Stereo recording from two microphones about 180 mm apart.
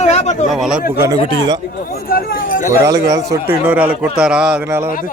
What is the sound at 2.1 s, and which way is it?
Speech, 55° left (ahead or behind).